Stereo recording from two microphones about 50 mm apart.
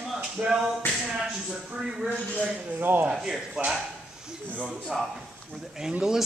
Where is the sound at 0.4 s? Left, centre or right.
Right.